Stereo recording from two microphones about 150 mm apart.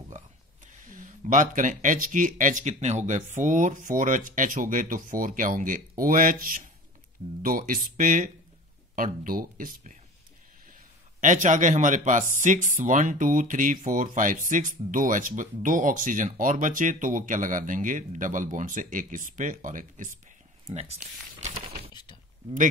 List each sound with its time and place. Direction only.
0.7 s a man's voice: 60° right (ahead or behind)